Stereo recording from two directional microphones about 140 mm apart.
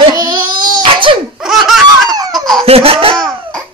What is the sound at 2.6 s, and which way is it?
Laughter, 45° right (ahead or behind).